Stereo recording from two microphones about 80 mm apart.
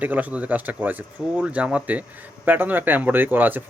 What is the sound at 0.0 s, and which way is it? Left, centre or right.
Speech, centre.